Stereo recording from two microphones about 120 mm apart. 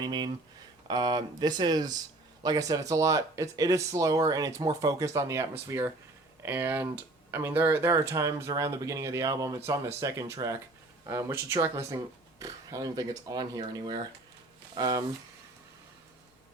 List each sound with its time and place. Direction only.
0.0 s speech: 35° right (ahead or behind)